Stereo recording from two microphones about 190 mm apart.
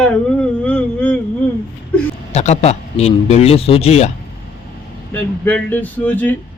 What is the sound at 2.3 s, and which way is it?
A man's voice, 35° left (ahead or behind).